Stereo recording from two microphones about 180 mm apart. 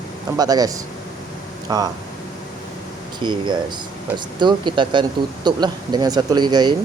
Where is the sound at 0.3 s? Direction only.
20° right (ahead or behind).